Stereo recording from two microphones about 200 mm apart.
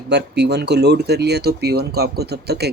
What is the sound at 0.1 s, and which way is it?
Speech, 55° right (ahead or behind).